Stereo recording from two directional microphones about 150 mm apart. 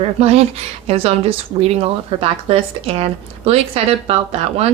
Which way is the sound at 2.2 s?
40° right (ahead or behind).